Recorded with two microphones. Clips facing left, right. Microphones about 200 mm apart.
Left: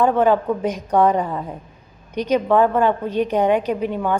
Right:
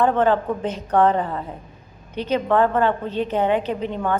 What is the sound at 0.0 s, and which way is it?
A woman's voice, 10° left (ahead or behind).